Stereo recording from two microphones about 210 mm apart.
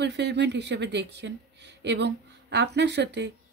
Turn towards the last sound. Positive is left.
turn(degrees=-55)  # may be behind; listen again after turning